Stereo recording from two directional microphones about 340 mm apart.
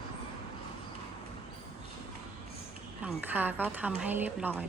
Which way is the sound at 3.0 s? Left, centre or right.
Centre.